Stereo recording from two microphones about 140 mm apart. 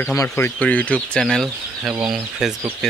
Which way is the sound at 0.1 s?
20° left (ahead or behind).